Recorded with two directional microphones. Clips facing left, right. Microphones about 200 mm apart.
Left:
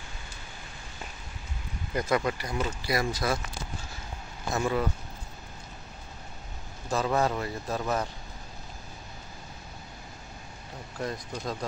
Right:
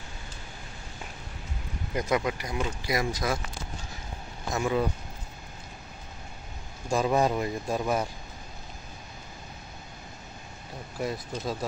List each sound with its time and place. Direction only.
2.0 s a man's voice: 15° right (ahead or behind)
4.6 s a man's voice: 15° right (ahead or behind)
6.9 s a man's voice: 15° right (ahead or behind)
11.0 s a man's voice: 10° right (ahead or behind)